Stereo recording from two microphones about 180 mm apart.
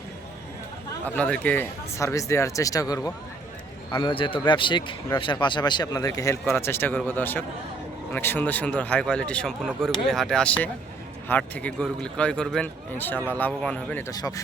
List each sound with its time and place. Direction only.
1.0 s a man's voice: 5° left (ahead or behind)
14.1 s speech: 20° left (ahead or behind)